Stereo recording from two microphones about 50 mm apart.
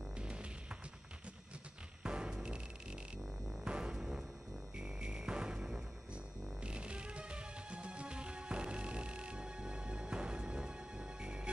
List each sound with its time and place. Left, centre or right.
0.2 s music: right
2.0 s music: centre